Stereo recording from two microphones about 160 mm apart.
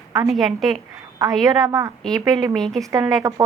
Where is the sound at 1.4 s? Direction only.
25° right (ahead or behind).